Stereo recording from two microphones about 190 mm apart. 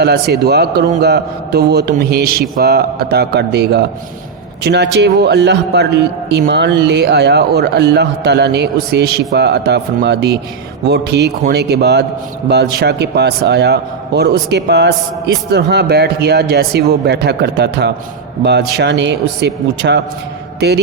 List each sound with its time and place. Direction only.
0.0 s a man's voice: 60° right (ahead or behind)